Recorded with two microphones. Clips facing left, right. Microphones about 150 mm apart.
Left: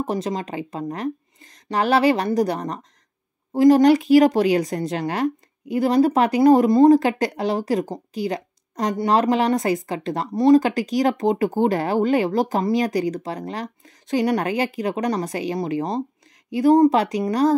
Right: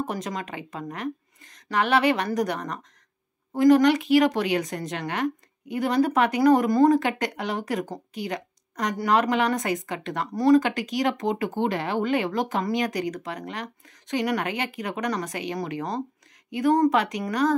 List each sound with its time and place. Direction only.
0.0 s a woman's voice: 30° left (ahead or behind)